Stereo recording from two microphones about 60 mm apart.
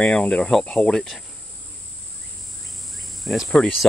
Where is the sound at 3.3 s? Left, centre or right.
Centre.